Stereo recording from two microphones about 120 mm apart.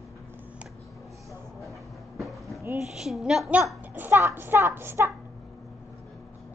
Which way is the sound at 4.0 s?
20° right (ahead or behind).